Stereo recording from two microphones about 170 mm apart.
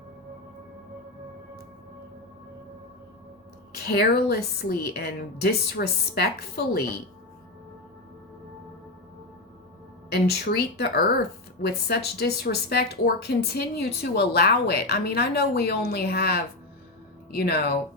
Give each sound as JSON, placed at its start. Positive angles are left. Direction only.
{"t": 3.7, "sound": "speech", "side_deg": 70}
{"t": 10.1, "sound": "speech", "side_deg": 75}